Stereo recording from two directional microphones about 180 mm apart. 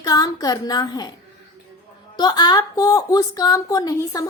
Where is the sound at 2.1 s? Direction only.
25° left (ahead or behind).